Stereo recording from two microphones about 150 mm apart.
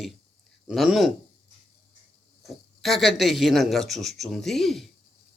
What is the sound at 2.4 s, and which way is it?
Speech, centre (ahead or behind).